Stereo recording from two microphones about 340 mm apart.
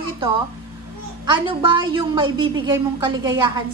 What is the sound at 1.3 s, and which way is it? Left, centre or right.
A woman's voice, centre.